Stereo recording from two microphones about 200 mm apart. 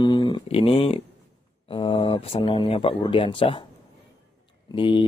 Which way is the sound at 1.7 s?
25° left (ahead or behind).